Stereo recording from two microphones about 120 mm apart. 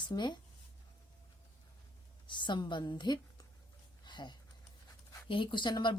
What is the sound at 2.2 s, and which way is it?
Speech, 40° left (ahead or behind).